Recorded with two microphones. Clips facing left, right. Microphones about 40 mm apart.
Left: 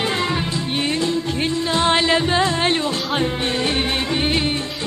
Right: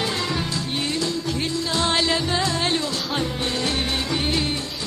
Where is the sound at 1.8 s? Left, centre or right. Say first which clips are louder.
Left 5 dB; left.